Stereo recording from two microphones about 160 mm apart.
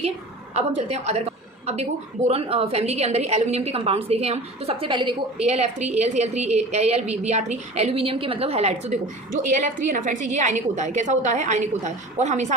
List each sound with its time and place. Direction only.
0.5 s a woman's voice: 45° right (ahead or behind)
5.5 s a woman's voice: 45° right (ahead or behind)